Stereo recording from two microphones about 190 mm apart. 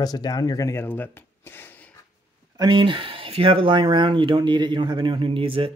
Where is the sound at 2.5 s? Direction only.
25° right (ahead or behind).